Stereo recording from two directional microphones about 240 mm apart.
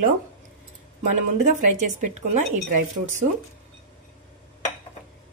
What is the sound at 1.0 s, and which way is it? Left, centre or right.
Speech, right.